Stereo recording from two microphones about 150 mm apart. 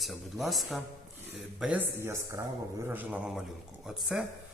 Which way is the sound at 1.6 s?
10° right (ahead or behind).